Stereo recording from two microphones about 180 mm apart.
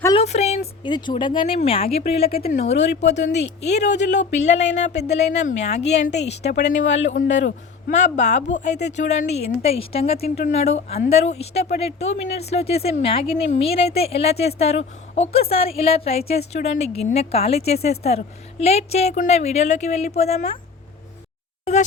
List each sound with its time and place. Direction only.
0.2 s a sound: 35° left (ahead or behind)
0.9 s speech: 25° left (ahead or behind); by 4.6 s 40° left (ahead or behind)
4.9 s a woman's voice: 65° left (ahead or behind)
5.1 s speech: 35° left (ahead or behind)
6.1 s a woman's voice: 70° left (ahead or behind)
7.3 s a man's voice: 80° left
7.9 s speech: 40° left (ahead or behind)
21.6 s a sound: 40° left (ahead or behind)